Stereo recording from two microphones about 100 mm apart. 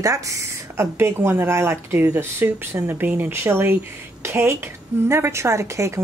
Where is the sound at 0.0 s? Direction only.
35° right (ahead or behind).